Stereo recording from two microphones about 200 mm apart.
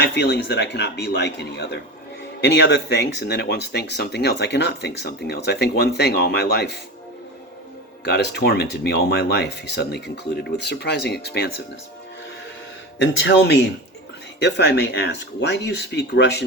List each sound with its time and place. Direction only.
0.0 s speech: 60° left (ahead or behind)
8.0 s speech: 55° left (ahead or behind)
13.0 s speech: 60° left (ahead or behind)